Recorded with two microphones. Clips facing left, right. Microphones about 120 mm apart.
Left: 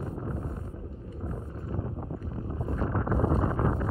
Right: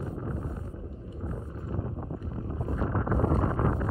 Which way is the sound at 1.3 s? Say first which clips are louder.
Even; centre (ahead or behind).